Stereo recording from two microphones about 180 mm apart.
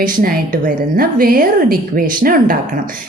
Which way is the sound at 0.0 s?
50° right (ahead or behind).